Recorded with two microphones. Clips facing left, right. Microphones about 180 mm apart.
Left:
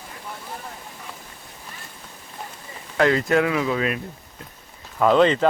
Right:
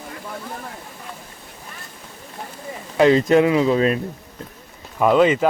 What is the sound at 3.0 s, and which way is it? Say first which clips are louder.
Speech: right 5 dB; 20° right (ahead or behind).